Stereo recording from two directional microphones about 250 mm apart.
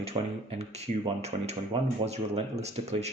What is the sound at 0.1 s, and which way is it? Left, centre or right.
Speech, centre.